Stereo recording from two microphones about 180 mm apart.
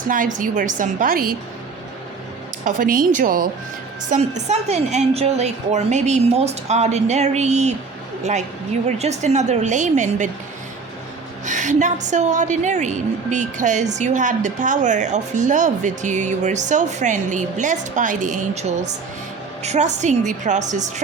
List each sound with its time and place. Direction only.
0.1 s a woman's voice: 45° right (ahead or behind)
2.6 s a woman's voice: 50° right (ahead or behind)
4.1 s a woman's voice: 40° right (ahead or behind)
11.4 s a woman's voice: 45° right (ahead or behind)